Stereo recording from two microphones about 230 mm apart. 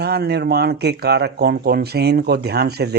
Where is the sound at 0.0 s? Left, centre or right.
Right.